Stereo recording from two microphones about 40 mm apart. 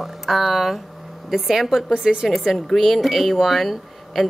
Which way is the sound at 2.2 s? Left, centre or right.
Centre.